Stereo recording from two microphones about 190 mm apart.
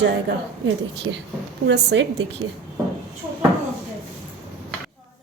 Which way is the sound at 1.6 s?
65° right (ahead or behind).